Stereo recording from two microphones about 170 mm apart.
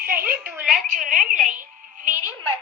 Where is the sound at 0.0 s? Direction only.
60° right (ahead or behind).